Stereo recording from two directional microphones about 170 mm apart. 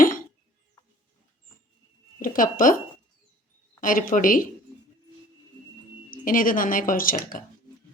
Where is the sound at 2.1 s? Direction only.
55° left (ahead or behind).